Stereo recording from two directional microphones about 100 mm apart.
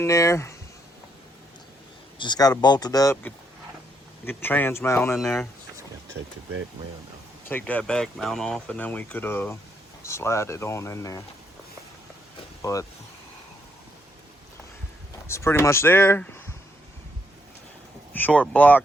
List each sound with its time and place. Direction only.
0.0 s speech: 30° left (ahead or behind)
2.1 s speech: 50° left (ahead or behind)
4.3 s speech: 20° left (ahead or behind)
7.4 s speech: 15° left (ahead or behind)
15.3 s speech: 25° left (ahead or behind)
18.1 s speech: 15° left (ahead or behind)